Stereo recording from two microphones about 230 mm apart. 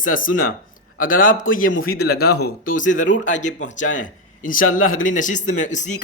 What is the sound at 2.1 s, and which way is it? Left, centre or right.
Speech, left.